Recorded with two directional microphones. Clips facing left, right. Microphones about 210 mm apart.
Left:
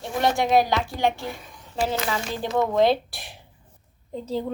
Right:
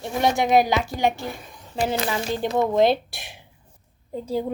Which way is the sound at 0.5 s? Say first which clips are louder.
Right 2 dB; 15° right (ahead or behind).